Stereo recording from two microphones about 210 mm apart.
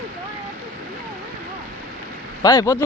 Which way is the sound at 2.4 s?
15° left (ahead or behind).